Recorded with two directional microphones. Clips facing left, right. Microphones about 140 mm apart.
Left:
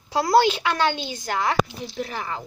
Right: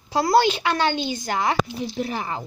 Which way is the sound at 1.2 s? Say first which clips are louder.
Left 1 dB; 5° right (ahead or behind).